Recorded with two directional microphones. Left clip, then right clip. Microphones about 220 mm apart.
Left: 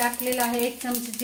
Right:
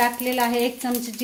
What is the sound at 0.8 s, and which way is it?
Speech, 45° right (ahead or behind).